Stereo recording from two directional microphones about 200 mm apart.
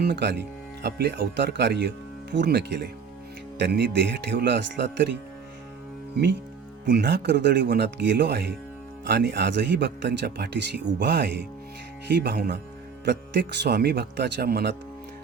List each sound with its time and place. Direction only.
0.0 s speech: 55° right (ahead or behind)
6.8 s speech: 60° right (ahead or behind)